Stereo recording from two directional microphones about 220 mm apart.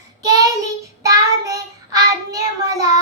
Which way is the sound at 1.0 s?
15° right (ahead or behind).